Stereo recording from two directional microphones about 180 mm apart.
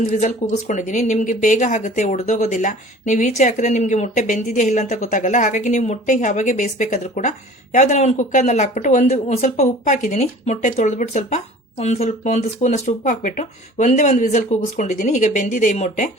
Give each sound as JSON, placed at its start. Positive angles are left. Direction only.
{"t": 0.1, "sound": "speech", "side_deg": 40}